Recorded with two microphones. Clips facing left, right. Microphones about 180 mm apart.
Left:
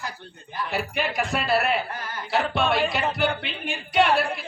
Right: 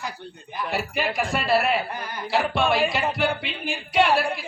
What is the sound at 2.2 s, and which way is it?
Speech, centre (ahead or behind).